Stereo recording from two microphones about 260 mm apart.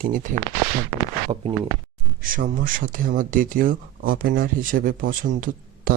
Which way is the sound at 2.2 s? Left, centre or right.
Right.